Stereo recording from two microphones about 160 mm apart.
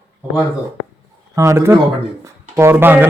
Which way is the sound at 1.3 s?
20° right (ahead or behind).